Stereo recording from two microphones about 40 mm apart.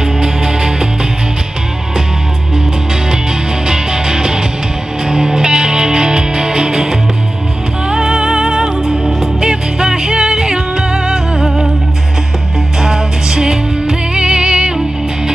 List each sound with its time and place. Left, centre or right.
0.0 s music: centre
3.6 s music: centre
11.3 s music: centre
12.8 s music: centre